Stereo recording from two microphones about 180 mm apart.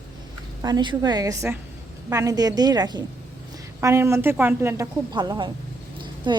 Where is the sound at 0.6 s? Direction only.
25° right (ahead or behind).